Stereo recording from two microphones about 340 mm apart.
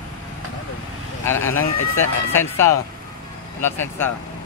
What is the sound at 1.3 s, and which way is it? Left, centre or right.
Speech, left.